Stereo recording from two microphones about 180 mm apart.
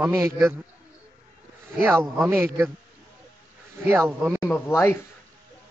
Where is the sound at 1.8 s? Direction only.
15° right (ahead or behind).